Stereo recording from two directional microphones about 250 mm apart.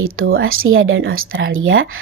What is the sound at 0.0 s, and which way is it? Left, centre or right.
A woman's voice, right.